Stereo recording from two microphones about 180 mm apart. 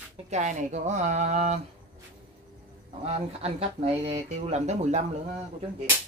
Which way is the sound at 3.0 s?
35° right (ahead or behind).